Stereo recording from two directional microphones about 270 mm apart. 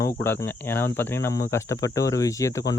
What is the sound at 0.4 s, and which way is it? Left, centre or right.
Speech, centre.